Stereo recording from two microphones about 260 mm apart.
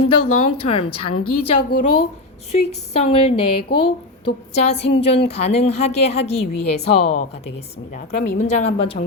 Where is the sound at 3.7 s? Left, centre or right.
Left.